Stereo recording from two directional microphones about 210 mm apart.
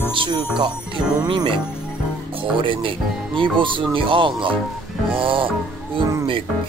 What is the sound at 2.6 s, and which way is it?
Music, 25° right (ahead or behind).